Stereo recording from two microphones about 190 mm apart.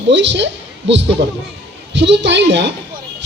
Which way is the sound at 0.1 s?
70° right (ahead or behind).